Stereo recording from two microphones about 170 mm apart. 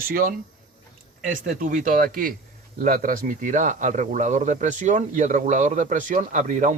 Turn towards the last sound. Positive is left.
turn(degrees=-50)  # may be behind; listen again after turning